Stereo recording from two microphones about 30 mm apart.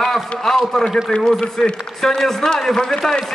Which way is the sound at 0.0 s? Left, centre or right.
Centre.